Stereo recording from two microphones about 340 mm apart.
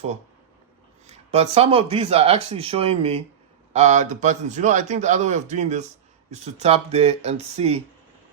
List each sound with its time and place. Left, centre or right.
1.0 s a man's voice: centre